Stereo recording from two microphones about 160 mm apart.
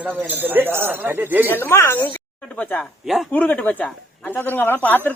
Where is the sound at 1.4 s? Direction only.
15° left (ahead or behind).